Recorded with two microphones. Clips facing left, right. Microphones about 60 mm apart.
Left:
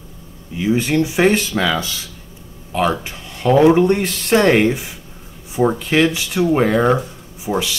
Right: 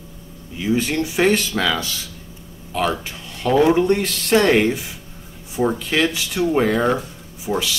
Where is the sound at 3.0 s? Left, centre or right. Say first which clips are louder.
Left 3 dB; left.